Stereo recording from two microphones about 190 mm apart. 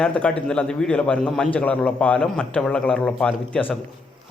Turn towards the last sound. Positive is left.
turn(degrees=5)  # may be behind; listen again after turning